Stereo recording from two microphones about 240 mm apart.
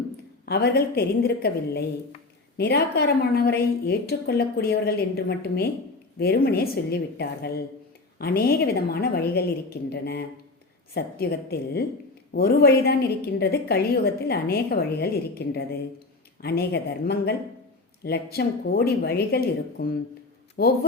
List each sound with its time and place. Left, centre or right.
0.4 s a woman's voice: left